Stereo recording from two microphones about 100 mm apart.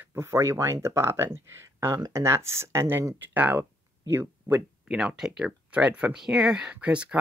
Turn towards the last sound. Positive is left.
turn(degrees=-15)  # may be behind; listen again after turning